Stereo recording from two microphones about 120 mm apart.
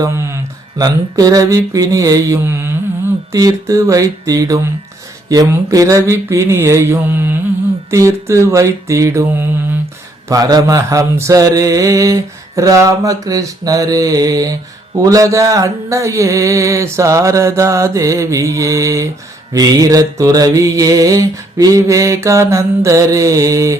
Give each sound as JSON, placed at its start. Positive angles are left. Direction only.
{"t": 0.0, "sound": "speech", "side_deg": -25}
{"t": 0.8, "sound": "mantra", "side_deg": -30}